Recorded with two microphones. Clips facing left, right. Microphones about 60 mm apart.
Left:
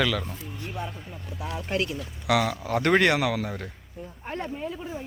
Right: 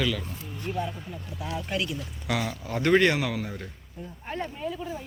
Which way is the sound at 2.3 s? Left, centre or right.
Left.